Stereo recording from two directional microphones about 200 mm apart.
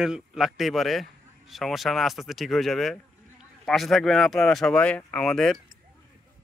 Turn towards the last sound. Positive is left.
turn(degrees=5)  # may be behind; listen again after turning